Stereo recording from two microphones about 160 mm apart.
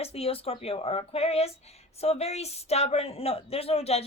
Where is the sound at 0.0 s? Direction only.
40° left (ahead or behind).